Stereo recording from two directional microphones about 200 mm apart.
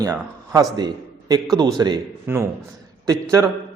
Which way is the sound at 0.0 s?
20° right (ahead or behind).